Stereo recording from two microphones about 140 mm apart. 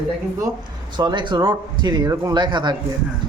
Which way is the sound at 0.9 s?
35° right (ahead or behind).